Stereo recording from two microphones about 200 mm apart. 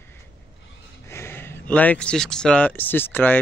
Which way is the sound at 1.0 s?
15° left (ahead or behind).